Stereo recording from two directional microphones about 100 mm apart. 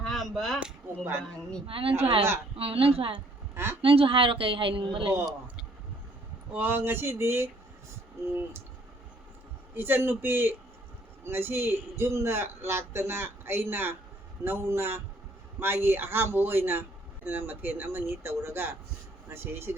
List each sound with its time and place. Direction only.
0.0 s a sound: centre (ahead or behind)
1.6 s a woman's voice: 65° right (ahead or behind)
3.5 s speech: 25° right (ahead or behind)
3.8 s a man's voice: 70° right (ahead or behind)
6.5 s a man's voice: 20° right (ahead or behind)
9.7 s a man's voice: 20° right (ahead or behind)